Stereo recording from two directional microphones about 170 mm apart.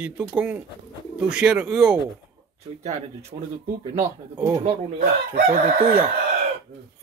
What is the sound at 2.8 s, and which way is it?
Speech, 40° right (ahead or behind).